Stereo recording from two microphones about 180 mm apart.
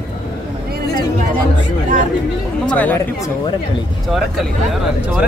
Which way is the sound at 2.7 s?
10° left (ahead or behind).